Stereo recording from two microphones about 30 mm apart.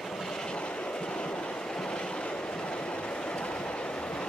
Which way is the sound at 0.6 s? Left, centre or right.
Left.